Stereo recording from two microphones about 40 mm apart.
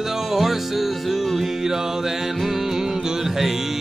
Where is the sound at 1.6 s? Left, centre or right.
Centre.